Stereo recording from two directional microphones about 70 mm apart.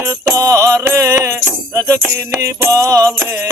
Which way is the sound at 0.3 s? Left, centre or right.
Right.